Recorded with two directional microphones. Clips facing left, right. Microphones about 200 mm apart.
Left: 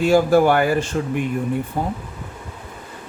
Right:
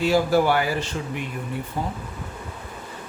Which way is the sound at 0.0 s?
50° left (ahead or behind).